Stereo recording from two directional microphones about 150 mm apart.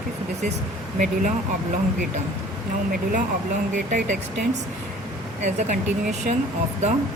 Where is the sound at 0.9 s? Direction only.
60° right (ahead or behind).